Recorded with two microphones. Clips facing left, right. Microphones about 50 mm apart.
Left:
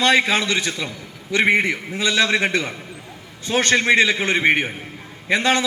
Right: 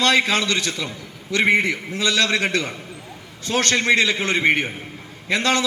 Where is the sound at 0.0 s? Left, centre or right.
Centre.